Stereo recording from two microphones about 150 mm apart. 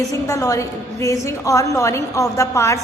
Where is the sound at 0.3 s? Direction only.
20° left (ahead or behind).